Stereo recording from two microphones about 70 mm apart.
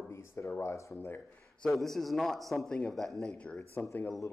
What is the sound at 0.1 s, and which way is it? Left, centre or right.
Speech, left.